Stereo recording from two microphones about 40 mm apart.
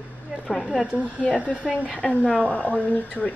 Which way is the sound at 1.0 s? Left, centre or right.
Right.